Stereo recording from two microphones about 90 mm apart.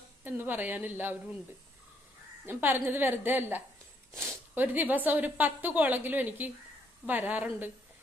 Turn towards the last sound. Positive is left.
turn(degrees=-20)  # may be behind; listen again after turning